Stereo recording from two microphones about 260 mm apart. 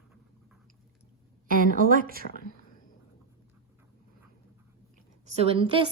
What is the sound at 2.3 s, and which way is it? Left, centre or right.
Speech, left.